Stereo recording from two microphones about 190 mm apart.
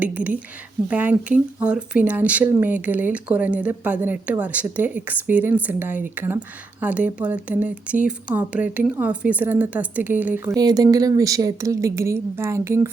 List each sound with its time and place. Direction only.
0.0 s speech: 10° right (ahead or behind)
10.5 s speech: 20° right (ahead or behind)